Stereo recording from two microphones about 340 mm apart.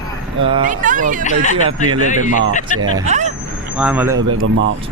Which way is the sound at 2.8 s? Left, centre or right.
Centre.